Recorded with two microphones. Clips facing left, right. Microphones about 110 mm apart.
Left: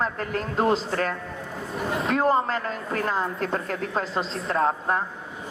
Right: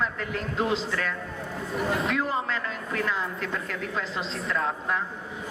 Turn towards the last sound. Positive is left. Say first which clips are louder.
# left 5 dB
turn(degrees=40)  # may be behind; listen again after turning